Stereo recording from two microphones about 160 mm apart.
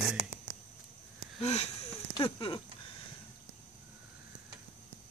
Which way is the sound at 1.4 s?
45° left (ahead or behind).